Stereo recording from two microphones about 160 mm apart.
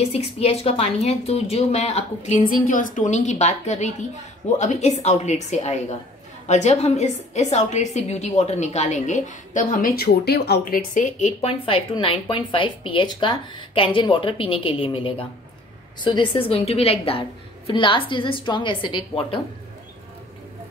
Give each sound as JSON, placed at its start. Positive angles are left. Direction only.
{"t": 0.0, "sound": "a woman's voice", "side_deg": 40}
{"t": 2.5, "sound": "a woman's voice", "side_deg": 55}